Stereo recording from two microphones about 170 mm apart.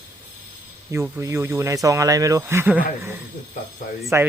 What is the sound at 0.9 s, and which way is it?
Speech, 15° right (ahead or behind).